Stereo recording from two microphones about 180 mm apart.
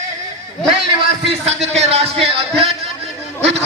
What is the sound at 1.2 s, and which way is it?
A man's voice, 35° right (ahead or behind).